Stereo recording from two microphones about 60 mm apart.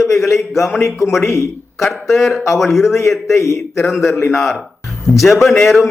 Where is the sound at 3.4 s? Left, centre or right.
Left.